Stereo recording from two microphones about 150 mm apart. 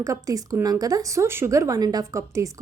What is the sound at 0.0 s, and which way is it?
A woman's voice, 25° right (ahead or behind).